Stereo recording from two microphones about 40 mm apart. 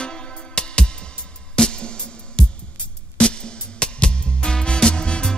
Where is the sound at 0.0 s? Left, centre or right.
Left.